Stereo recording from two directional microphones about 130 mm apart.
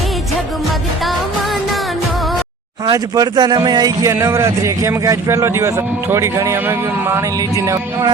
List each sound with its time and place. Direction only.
2.8 s speech: 30° right (ahead or behind)
4.1 s a man's voice: 20° right (ahead or behind)